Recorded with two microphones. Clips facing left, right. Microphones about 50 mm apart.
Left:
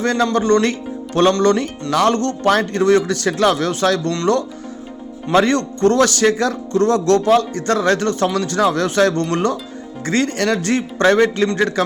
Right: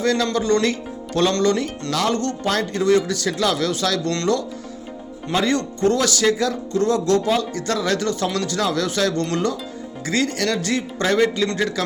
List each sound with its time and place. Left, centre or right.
0.0 s speech: left
5.3 s speech: left